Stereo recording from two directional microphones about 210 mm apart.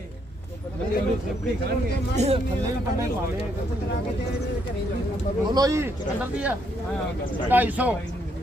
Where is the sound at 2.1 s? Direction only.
30° right (ahead or behind).